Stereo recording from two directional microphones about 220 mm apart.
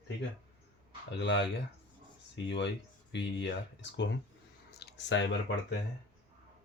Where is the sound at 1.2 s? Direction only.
55° left (ahead or behind).